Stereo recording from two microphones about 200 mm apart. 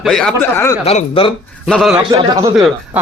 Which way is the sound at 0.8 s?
30° left (ahead or behind).